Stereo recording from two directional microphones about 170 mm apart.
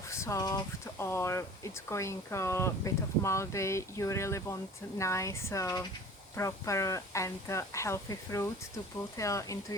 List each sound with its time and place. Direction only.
0.1 s speech: 15° left (ahead or behind)